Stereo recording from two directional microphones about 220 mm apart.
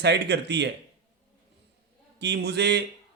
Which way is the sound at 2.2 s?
50° right (ahead or behind).